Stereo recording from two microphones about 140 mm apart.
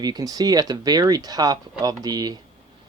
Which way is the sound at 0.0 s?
30° right (ahead or behind).